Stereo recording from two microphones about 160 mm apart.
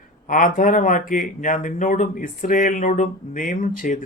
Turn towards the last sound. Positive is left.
turn(degrees=55)  # may be behind; listen again after turning